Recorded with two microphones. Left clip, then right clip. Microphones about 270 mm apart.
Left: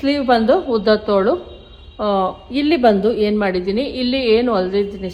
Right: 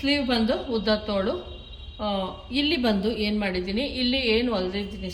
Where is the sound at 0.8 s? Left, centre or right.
Centre.